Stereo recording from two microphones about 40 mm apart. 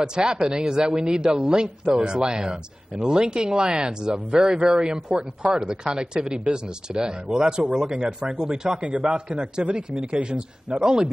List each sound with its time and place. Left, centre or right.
0.0 s a man's voice: centre